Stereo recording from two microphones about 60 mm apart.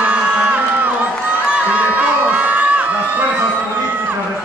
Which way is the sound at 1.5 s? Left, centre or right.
Right.